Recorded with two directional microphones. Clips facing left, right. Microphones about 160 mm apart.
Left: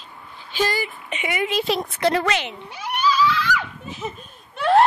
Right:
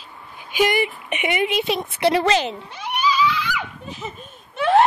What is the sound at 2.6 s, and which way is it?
Cat, 10° left (ahead or behind).